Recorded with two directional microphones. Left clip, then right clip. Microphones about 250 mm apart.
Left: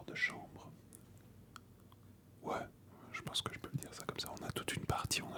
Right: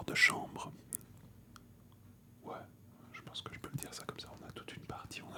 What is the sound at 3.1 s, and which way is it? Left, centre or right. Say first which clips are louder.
Whispering: left 6 dB; left.